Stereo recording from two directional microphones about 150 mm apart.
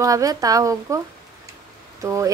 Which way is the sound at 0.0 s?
25° right (ahead or behind).